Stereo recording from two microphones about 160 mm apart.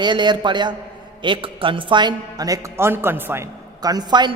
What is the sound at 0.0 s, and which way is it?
A woman's voice, 30° right (ahead or behind).